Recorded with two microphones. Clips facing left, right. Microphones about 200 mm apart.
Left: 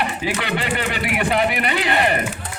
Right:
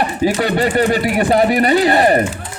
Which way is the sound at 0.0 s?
40° right (ahead or behind).